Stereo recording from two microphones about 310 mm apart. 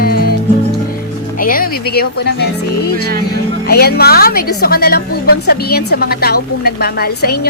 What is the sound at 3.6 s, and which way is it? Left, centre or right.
A woman's voice, left.